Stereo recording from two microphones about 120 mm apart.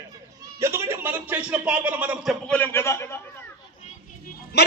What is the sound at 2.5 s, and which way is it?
Speech, 15° left (ahead or behind).